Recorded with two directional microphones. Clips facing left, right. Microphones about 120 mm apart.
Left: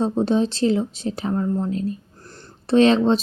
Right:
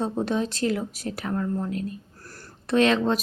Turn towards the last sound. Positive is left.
turn(degrees=30)  # may be behind; listen again after turning